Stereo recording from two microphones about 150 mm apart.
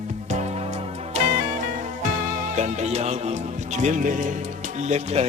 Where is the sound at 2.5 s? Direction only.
50° right (ahead or behind).